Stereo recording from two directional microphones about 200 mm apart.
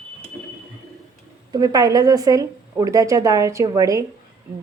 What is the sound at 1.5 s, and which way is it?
A woman's voice, 20° right (ahead or behind).